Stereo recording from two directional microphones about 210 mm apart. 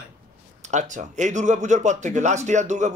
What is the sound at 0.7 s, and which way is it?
Speech, 35° right (ahead or behind).